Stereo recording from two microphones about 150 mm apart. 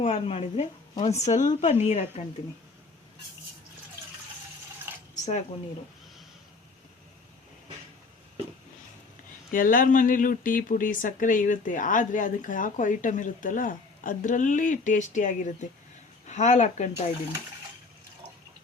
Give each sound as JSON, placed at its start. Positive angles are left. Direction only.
{"t": 0.0, "sound": "a woman's voice", "side_deg": 45}
{"t": 1.2, "sound": "a woman's voice", "side_deg": 55}
{"t": 5.1, "sound": "a sound", "side_deg": 50}
{"t": 9.5, "sound": "speech", "side_deg": 65}